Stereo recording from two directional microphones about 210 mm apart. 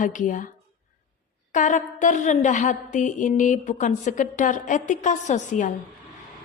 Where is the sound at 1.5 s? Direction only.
35° left (ahead or behind).